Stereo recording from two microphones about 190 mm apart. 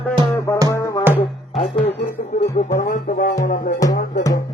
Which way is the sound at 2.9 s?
45° left (ahead or behind).